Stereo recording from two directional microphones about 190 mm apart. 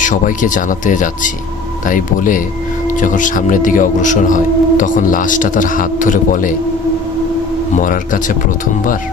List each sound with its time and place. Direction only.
0.0 s speech: 45° left (ahead or behind)
7.8 s speech: 45° left (ahead or behind)